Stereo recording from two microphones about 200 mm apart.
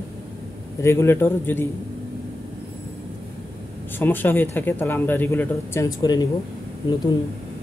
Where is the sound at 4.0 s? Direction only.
10° left (ahead or behind).